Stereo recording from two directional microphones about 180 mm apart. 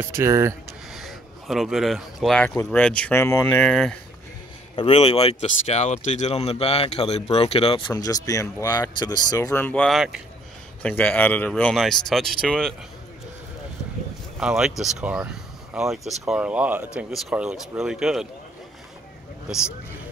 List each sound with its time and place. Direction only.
0.0 s speech: 15° right (ahead or behind)
0.9 s speech: centre (ahead or behind)
2.5 s speech: 10° left (ahead or behind)
4.7 s speech: 30° left (ahead or behind)
9.5 s speech: 10° left (ahead or behind)
14.4 s speech: 5° right (ahead or behind)